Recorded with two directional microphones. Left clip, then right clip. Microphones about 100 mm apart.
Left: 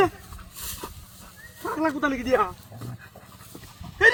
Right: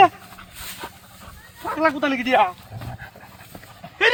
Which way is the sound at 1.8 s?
25° right (ahead or behind).